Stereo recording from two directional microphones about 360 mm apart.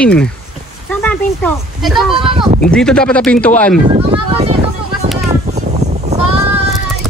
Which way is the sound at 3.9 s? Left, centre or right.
Centre.